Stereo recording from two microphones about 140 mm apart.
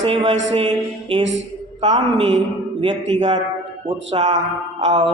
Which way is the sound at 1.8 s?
50° right (ahead or behind).